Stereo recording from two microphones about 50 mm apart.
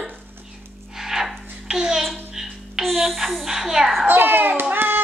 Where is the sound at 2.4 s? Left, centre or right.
Centre.